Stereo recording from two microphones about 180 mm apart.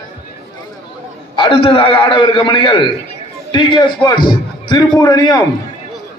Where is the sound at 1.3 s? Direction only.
30° left (ahead or behind).